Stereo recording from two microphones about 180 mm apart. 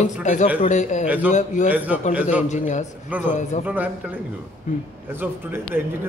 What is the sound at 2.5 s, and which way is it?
A man's voice, 40° left (ahead or behind).